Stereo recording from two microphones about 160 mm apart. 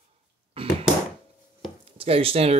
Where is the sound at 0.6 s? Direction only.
35° right (ahead or behind).